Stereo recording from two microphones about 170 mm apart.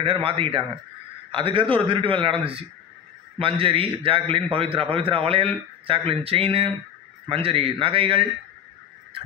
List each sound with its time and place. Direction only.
0.0 s a man's voice: 35° right (ahead or behind)